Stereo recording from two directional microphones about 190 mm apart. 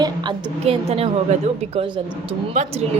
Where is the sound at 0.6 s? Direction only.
30° right (ahead or behind).